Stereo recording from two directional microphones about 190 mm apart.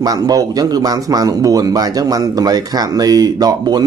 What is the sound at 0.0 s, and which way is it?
Speech, 20° right (ahead or behind).